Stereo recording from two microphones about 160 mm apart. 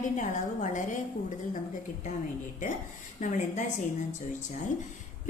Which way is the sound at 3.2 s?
50° left (ahead or behind).